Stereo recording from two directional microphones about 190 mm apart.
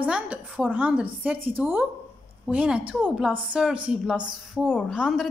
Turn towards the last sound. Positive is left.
turn(degrees=0)  # may be behind; listen again after turning